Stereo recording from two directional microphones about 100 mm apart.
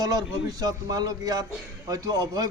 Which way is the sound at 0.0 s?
40° right (ahead or behind).